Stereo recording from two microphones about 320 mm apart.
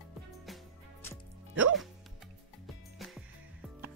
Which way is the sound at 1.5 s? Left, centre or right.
Right.